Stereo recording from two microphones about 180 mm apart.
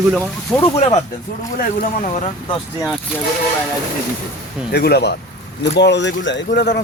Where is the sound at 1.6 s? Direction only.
45° left (ahead or behind).